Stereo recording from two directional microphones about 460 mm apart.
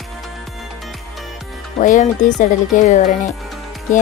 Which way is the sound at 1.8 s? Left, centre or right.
Centre.